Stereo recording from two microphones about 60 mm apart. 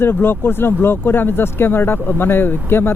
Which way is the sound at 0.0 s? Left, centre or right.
Left.